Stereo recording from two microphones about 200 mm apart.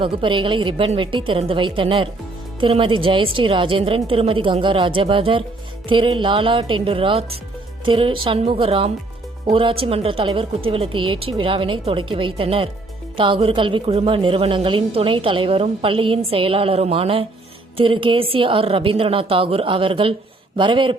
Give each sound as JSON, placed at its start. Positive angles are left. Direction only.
{"t": 0.0, "sound": "a woman's voice", "side_deg": -25}